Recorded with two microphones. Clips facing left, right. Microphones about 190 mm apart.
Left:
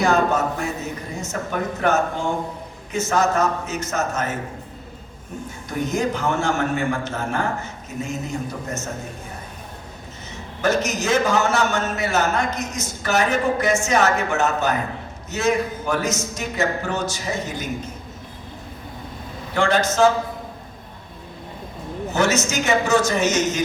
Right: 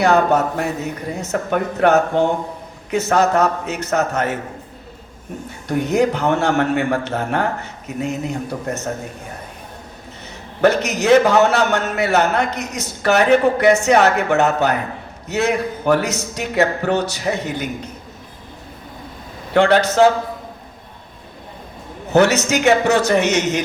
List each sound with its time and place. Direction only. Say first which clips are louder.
0.0 s a man's voice: right 4 dB; 65° right (ahead or behind)
5.6 s a man's voice: right 6 dB; 65° right (ahead or behind)
10.6 s a man's voice: right 5 dB; 65° right (ahead or behind)
19.5 s a man's voice: right 5 dB; 65° right (ahead or behind)
22.1 s a man's voice: right 7 dB; 65° right (ahead or behind)